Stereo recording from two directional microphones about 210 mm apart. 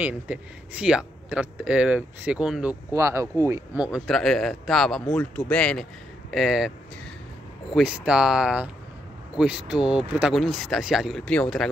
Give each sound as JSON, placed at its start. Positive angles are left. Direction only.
{"t": 0.0, "sound": "speech", "side_deg": -5}
{"t": 7.7, "sound": "speech", "side_deg": -5}